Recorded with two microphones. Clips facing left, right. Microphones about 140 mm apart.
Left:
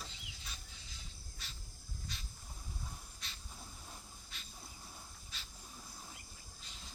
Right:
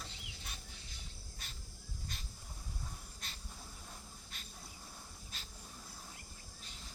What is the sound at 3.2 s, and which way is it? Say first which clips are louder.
Hiss: right 2 dB; 50° right (ahead or behind).